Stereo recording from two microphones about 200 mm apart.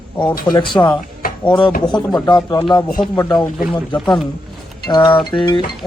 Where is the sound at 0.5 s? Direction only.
25° left (ahead or behind).